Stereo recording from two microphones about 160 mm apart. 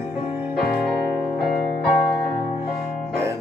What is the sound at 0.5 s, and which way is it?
Music, 5° left (ahead or behind).